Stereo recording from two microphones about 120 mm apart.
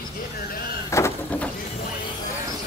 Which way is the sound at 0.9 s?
25° left (ahead or behind).